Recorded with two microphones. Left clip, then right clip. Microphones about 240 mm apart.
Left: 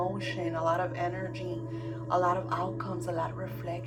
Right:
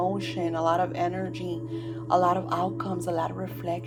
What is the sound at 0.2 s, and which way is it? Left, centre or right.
A woman's voice, right.